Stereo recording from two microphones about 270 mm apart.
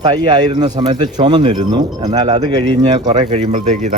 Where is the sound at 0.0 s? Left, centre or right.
Centre.